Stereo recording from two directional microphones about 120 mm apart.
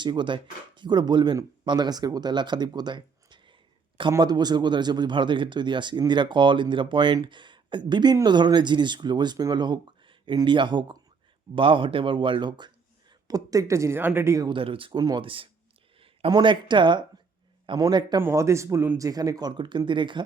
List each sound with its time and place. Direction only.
0.0 s speech: 40° right (ahead or behind)
14.5 s speech: 50° right (ahead or behind)
14.9 s speech: 35° right (ahead or behind)
18.2 s speech: 20° right (ahead or behind); by 20.2 s 40° right (ahead or behind)